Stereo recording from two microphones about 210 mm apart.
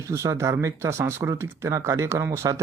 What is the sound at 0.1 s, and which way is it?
Speech, 15° right (ahead or behind).